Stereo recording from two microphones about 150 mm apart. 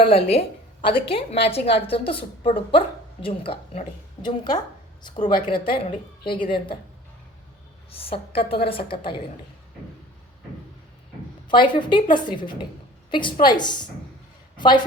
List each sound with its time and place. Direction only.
0.0 s a woman's voice: 40° left (ahead or behind)
7.9 s a woman's voice: 40° left (ahead or behind)
11.4 s a woman's voice: 30° left (ahead or behind)